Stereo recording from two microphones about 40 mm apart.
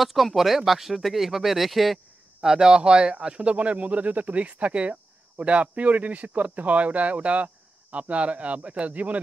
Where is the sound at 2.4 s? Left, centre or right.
Centre.